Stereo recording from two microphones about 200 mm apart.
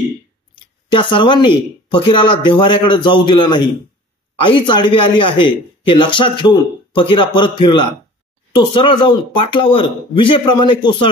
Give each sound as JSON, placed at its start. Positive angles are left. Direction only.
{"t": 0.9, "sound": "speech", "side_deg": 25}